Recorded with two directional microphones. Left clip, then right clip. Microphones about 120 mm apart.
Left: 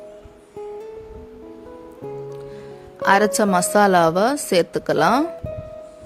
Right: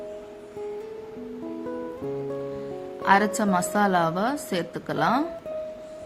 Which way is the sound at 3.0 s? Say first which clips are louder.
Left 5 dB; 90° left.